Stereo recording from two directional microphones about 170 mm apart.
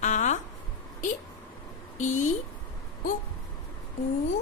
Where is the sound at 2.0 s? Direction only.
45° left (ahead or behind).